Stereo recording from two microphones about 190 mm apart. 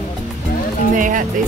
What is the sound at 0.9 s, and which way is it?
Speech, 45° right (ahead or behind).